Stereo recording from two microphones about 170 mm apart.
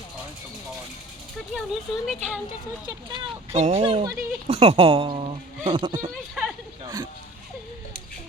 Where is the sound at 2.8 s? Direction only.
25° right (ahead or behind).